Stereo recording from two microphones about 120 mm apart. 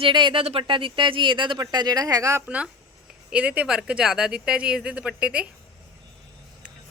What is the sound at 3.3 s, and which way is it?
Speech, 10° right (ahead or behind).